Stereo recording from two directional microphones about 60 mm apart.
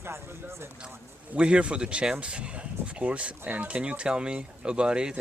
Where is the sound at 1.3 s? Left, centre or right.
Centre.